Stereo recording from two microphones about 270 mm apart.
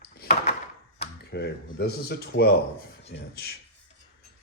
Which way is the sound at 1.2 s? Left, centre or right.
Left.